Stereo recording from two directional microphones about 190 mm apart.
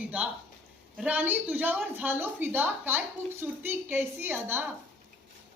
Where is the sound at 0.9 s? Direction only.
5° right (ahead or behind).